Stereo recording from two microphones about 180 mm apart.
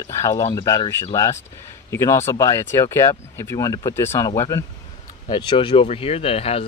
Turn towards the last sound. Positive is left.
turn(degrees=35)  # may be behind; listen again after turning